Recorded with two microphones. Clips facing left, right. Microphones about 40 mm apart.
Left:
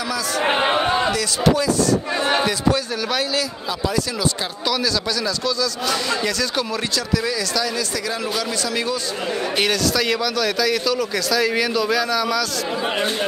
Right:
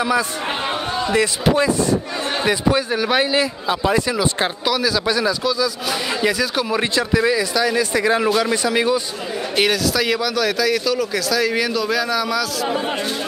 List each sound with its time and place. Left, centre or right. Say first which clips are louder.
0.5 s speech: left 5 dB; left
1.1 s a man's voice: right 2 dB; right
2.4 s a man's voice: right 2 dB; centre
4.6 s a man's voice: right 1 dB; centre
9.6 s speech: right 3 dB; centre